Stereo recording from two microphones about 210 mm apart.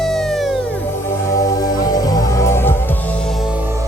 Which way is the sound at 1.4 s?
15° left (ahead or behind).